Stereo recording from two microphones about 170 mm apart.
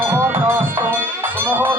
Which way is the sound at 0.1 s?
15° right (ahead or behind).